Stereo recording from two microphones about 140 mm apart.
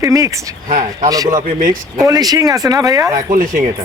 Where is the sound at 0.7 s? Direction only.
60° right (ahead or behind).